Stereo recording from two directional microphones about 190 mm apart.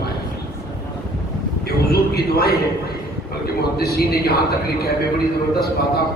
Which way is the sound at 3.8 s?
55° left (ahead or behind).